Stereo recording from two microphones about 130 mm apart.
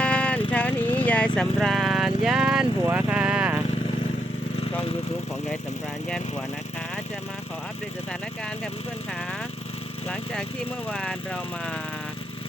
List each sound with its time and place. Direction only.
0.0 s vehicle: 10° left (ahead or behind); by 3.6 s 10° right (ahead or behind)
10.8 s speech: 5° left (ahead or behind)